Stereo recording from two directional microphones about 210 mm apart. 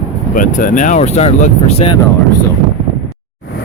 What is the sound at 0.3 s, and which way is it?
Speech, 40° left (ahead or behind).